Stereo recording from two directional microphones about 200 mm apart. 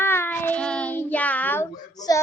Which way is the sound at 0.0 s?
10° left (ahead or behind).